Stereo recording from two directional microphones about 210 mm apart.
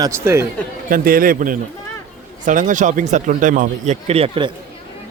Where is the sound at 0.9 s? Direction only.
40° right (ahead or behind); by 4.5 s 25° right (ahead or behind).